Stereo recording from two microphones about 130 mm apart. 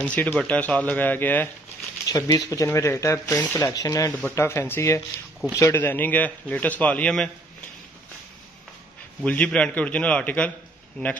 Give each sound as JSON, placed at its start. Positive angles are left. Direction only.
{"t": 0.0, "sound": "a man's voice", "side_deg": 10}
{"t": 2.0, "sound": "a man's voice", "side_deg": 25}
{"t": 9.2, "sound": "a man's voice", "side_deg": 10}